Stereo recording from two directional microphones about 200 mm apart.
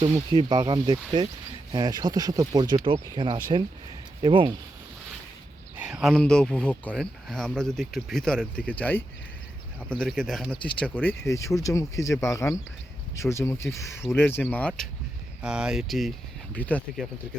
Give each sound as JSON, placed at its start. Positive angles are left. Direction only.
{"t": 0.0, "sound": "speech", "side_deg": -20}
{"t": 5.7, "sound": "speech", "side_deg": -5}
{"t": 15.4, "sound": "speech", "side_deg": -5}